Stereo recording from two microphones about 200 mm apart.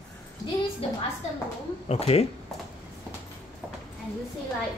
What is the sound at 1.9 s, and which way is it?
Speech, 30° left (ahead or behind).